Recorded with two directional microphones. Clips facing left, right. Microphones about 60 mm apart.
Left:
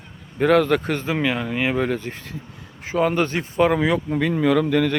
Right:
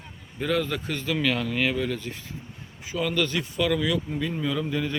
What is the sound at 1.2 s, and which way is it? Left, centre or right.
Speech, left.